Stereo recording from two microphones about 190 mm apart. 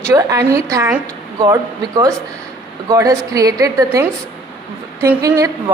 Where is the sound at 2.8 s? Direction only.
15° right (ahead or behind).